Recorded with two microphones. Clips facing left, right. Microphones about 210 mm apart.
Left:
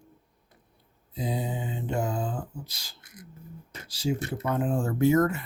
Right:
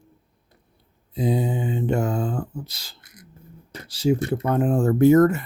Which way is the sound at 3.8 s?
60° right (ahead or behind).